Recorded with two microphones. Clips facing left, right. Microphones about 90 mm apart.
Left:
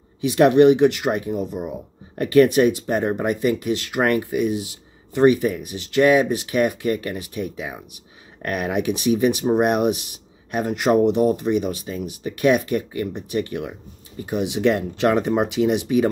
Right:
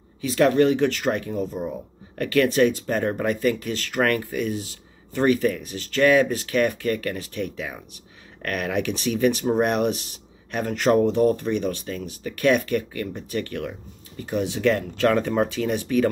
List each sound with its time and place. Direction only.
0.2 s speech: 15° left (ahead or behind)